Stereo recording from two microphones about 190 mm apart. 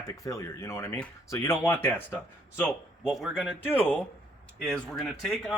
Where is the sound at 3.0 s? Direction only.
Centre (ahead or behind).